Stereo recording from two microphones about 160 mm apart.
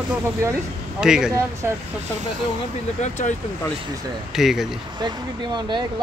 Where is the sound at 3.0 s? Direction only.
45° left (ahead or behind).